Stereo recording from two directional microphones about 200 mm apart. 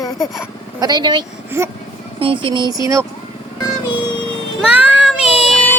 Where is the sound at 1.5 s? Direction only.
10° right (ahead or behind).